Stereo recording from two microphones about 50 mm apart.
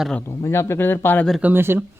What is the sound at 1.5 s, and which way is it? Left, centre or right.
Speech, right.